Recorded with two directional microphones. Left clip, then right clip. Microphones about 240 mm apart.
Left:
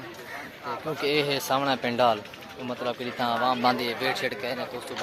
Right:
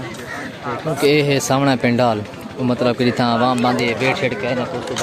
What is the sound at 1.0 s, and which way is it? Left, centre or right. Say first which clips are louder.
Speech: right 10 dB; centre.